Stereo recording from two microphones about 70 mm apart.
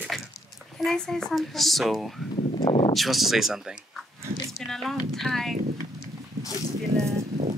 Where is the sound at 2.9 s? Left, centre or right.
Centre.